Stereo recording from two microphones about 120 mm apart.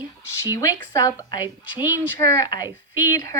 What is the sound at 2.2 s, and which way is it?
Speech, 25° left (ahead or behind).